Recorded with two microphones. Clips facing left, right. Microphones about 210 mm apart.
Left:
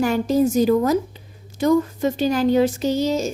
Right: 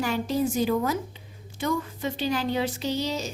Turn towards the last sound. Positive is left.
turn(degrees=45)  # may be behind; listen again after turning